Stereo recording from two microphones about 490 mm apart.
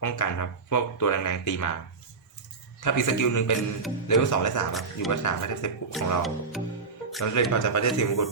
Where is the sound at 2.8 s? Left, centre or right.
Left.